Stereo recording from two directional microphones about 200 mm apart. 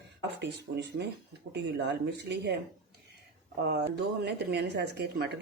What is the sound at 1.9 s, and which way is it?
Speech, 60° right (ahead or behind).